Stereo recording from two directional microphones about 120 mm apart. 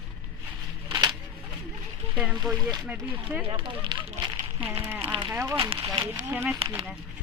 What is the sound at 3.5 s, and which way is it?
Speech, 45° right (ahead or behind).